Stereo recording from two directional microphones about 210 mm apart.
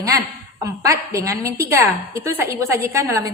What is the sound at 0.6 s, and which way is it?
A woman's voice, 15° right (ahead or behind).